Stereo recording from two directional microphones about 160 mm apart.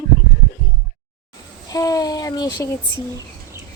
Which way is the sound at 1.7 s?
20° left (ahead or behind).